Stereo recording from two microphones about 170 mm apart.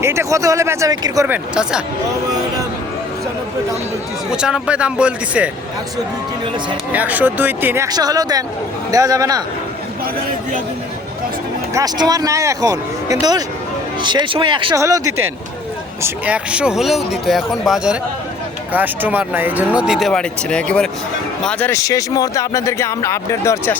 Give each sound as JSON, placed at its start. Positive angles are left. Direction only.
{"t": 0.0, "sound": "speech", "side_deg": -15}
{"t": 4.3, "sound": "speech", "side_deg": -5}
{"t": 6.9, "sound": "speech", "side_deg": -10}
{"t": 7.9, "sound": "speech", "side_deg": -20}
{"t": 11.7, "sound": "speech", "side_deg": -20}
{"t": 21.7, "sound": "speech", "side_deg": 20}